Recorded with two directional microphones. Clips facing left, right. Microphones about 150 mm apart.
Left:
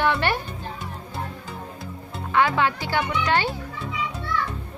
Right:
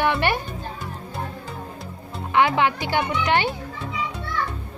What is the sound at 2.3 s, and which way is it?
A woman's voice, 20° right (ahead or behind).